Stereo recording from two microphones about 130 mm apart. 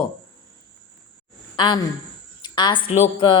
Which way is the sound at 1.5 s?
35° left (ahead or behind).